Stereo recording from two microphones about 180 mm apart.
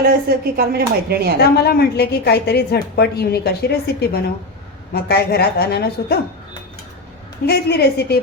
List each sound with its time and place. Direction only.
0.0 s speech: 60° right (ahead or behind)
1.5 s a woman's voice: 60° left (ahead or behind)
7.4 s a woman's voice: 65° left (ahead or behind)